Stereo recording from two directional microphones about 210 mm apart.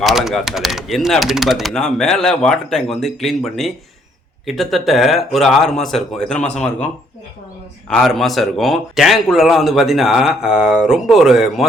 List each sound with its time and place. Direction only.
0.0 s speech: centre (ahead or behind)
7.9 s speech: centre (ahead or behind)